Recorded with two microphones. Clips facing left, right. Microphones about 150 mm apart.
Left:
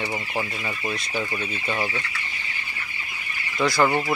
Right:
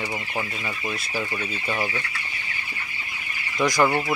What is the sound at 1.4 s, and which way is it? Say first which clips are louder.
Speech: even; 5° right (ahead or behind).